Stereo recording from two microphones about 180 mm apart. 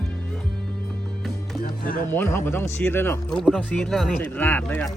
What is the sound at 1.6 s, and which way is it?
Music, 55° left (ahead or behind).